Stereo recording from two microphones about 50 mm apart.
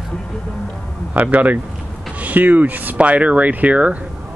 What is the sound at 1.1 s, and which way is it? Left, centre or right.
Speech, right.